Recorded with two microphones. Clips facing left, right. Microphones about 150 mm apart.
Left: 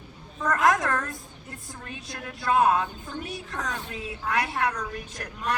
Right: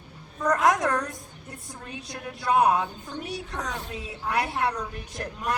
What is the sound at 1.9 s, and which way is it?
A woman's voice, 20° right (ahead or behind).